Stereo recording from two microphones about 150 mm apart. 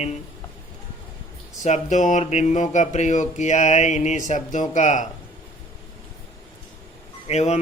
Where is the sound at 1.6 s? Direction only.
50° left (ahead or behind).